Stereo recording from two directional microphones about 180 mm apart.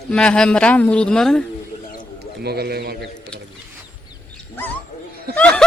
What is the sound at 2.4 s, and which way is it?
Speech, 60° right (ahead or behind).